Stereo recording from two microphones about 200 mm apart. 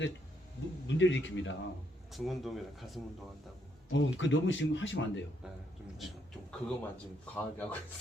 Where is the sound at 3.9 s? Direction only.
65° left (ahead or behind).